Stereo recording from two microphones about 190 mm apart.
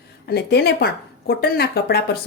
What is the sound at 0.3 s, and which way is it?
Speech, 60° left (ahead or behind).